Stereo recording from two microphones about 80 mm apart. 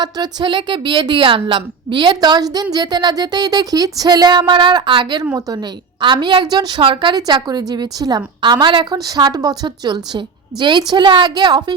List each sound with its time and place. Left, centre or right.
0.0 s a woman's voice: right
5.2 s a woman's voice: right
5.5 s a woman's voice: right
7.2 s a woman's voice: right
8.9 s a woman's voice: right